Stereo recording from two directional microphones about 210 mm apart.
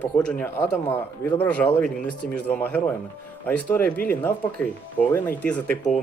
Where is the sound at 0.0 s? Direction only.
5° left (ahead or behind).